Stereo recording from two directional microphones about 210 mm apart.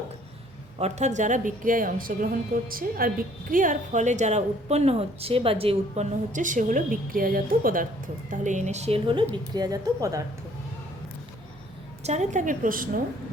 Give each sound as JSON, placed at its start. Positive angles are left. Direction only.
{"t": 0.8, "sound": "a woman's voice", "side_deg": -30}
{"t": 12.0, "sound": "a woman's voice", "side_deg": -35}